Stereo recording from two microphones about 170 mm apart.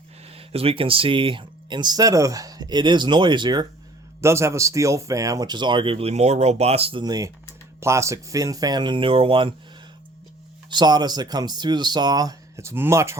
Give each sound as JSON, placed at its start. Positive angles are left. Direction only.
{"t": 0.3, "sound": "speech", "side_deg": -35}
{"t": 7.0, "sound": "speech", "side_deg": -20}
{"t": 10.7, "sound": "speech", "side_deg": -25}